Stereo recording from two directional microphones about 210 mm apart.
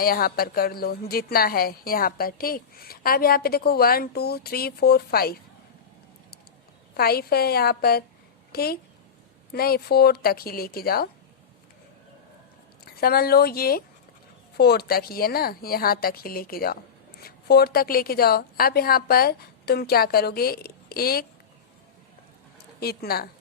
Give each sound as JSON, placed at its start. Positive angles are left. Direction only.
{"t": 0.0, "sound": "a woman's voice", "side_deg": 45}
{"t": 6.9, "sound": "a woman's voice", "side_deg": 45}
{"t": 12.8, "sound": "a woman's voice", "side_deg": 45}
{"t": 22.8, "sound": "a woman's voice", "side_deg": 45}